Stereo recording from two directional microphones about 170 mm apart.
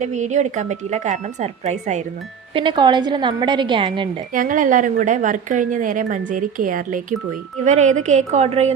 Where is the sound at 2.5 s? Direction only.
30° right (ahead or behind).